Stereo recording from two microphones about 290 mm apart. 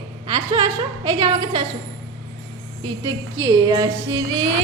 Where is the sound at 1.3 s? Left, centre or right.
Centre.